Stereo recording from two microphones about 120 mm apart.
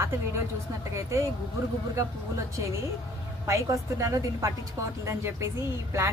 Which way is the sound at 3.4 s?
25° right (ahead or behind).